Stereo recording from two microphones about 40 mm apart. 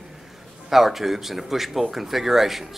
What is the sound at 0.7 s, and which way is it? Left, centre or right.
Speech, centre.